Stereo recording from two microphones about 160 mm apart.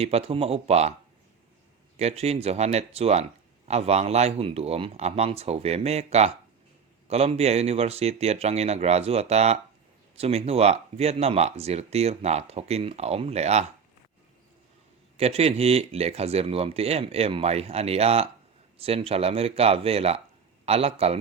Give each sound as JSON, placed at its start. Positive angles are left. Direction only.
{"t": 0.0, "sound": "speech", "side_deg": -40}
{"t": 2.0, "sound": "speech", "side_deg": -40}
{"t": 15.2, "sound": "speech", "side_deg": -40}